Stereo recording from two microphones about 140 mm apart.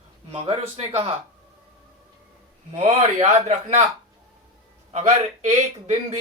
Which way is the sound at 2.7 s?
50° right (ahead or behind).